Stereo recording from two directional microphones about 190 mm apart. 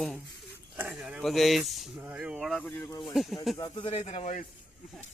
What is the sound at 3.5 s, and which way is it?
Speech, 20° left (ahead or behind).